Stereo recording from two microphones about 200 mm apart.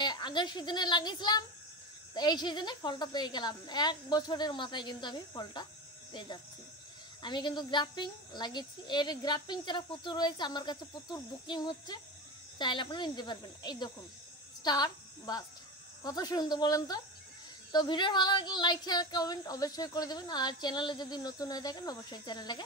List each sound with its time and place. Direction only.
0.0 s a woman's voice: 20° left (ahead or behind)